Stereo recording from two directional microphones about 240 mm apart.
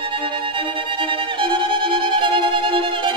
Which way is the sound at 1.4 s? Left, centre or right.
Right.